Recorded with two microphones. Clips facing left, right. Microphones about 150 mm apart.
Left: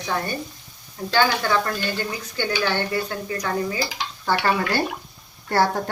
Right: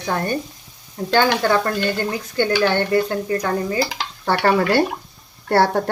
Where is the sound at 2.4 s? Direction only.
50° right (ahead or behind).